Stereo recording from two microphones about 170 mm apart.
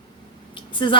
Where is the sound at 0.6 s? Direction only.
30° left (ahead or behind).